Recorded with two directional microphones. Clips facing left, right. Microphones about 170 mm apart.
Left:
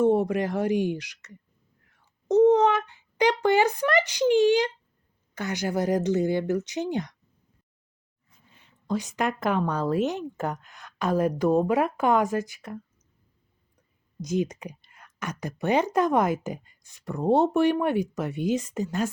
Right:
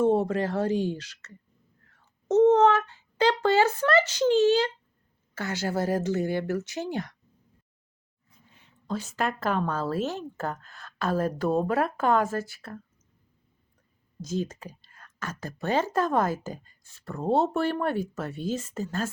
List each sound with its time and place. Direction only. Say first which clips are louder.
0.0 s speech: left 1 dB; 15° left (ahead or behind)
1.8 s a sound: right 2 dB; 15° left (ahead or behind)
2.3 s speech: even; 10° left (ahead or behind)
8.9 s speech: left 2 dB; 15° left (ahead or behind)
14.2 s speech: left 4 dB; 15° left (ahead or behind)